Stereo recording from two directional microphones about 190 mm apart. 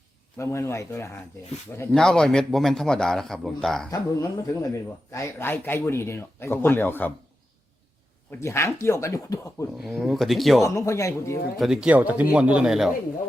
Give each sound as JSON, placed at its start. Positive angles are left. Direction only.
{"t": 0.3, "sound": "a man's voice", "side_deg": 15}
{"t": 3.9, "sound": "a man's voice", "side_deg": 15}
{"t": 8.3, "sound": "a man's voice", "side_deg": 15}
{"t": 9.7, "sound": "a man's voice", "side_deg": 0}
{"t": 10.6, "sound": "a man's voice", "side_deg": 15}
{"t": 11.5, "sound": "a man's voice", "side_deg": 0}